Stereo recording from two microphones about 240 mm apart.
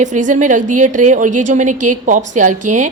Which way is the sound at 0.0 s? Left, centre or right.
Right.